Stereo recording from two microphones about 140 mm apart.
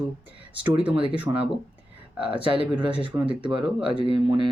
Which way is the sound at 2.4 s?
40° right (ahead or behind).